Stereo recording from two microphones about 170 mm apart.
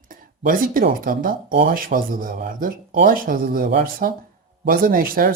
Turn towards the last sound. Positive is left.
turn(degrees=-55)  # may be behind; listen again after turning